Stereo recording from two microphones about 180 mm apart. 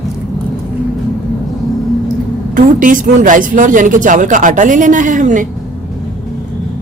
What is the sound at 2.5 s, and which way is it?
Speech, 45° right (ahead or behind).